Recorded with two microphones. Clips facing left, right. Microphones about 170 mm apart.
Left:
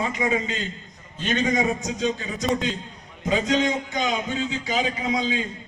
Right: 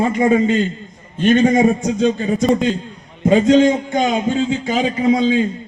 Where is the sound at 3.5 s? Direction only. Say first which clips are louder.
Right 11 dB; 50° right (ahead or behind).